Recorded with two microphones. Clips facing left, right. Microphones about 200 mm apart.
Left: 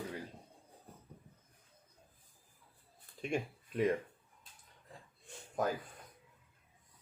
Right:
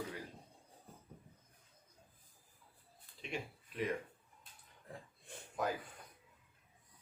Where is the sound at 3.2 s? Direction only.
45° left (ahead or behind).